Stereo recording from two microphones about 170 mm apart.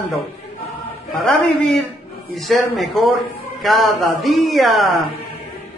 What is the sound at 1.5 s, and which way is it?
A man's voice, centre (ahead or behind).